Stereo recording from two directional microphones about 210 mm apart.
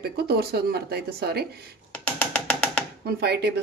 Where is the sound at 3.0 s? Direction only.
50° right (ahead or behind).